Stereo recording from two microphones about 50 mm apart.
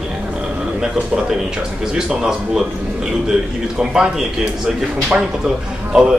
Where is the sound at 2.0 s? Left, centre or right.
Centre.